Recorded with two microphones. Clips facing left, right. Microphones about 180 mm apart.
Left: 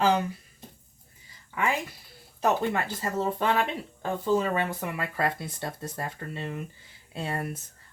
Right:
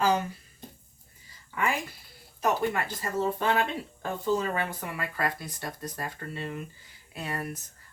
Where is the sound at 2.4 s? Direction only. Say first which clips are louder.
Left 2 dB; 25° left (ahead or behind).